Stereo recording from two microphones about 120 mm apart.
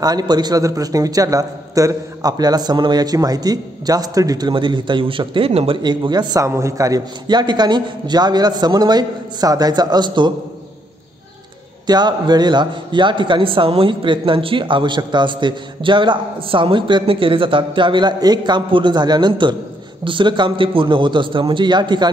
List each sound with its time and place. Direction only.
0.0 s a man's voice: 35° right (ahead or behind); by 5.8 s 55° right (ahead or behind)
5.8 s a man's voice: 35° right (ahead or behind)
6.4 s a man's voice: 25° right (ahead or behind)
11.8 s a man's voice: 35° right (ahead or behind)